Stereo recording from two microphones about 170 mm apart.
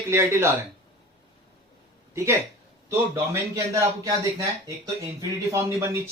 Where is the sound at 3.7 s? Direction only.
20° right (ahead or behind).